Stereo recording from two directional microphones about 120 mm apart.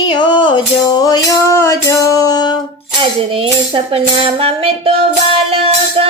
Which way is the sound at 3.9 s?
50° right (ahead or behind).